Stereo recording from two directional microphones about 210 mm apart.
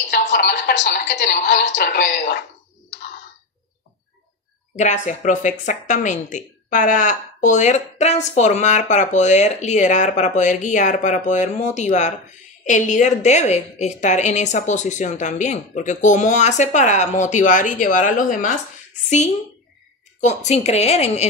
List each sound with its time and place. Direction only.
0.3 s a woman's voice: 50° left (ahead or behind)
4.7 s speech: 35° left (ahead or behind)